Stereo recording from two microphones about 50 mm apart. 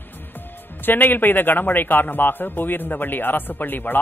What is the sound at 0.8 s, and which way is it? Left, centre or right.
Speech, left.